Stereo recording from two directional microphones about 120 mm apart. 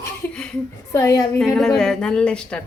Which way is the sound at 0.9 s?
25° left (ahead or behind).